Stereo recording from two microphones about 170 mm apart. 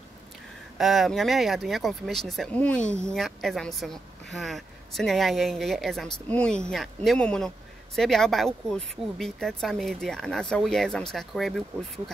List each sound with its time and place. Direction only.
0.7 s speech: centre (ahead or behind)